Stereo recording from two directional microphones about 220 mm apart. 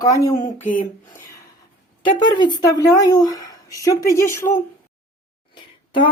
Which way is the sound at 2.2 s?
20° left (ahead or behind).